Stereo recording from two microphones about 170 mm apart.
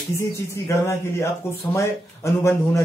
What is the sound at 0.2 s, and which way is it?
Speech, 15° left (ahead or behind).